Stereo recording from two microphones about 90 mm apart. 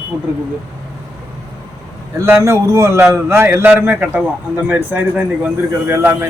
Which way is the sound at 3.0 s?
20° right (ahead or behind).